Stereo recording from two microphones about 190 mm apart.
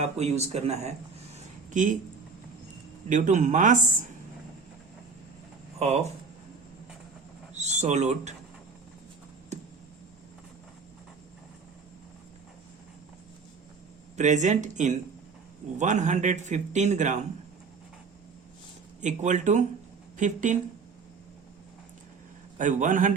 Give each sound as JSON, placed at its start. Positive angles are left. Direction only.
{"t": 0.0, "sound": "a man's voice", "side_deg": -35}
{"t": 3.1, "sound": "a man's voice", "side_deg": -40}
{"t": 5.8, "sound": "a man's voice", "side_deg": -35}
{"t": 7.5, "sound": "speech", "side_deg": -35}
{"t": 14.2, "sound": "a man's voice", "side_deg": -40}
{"t": 19.0, "sound": "a man's voice", "side_deg": -40}
{"t": 22.5, "sound": "a man's voice", "side_deg": -40}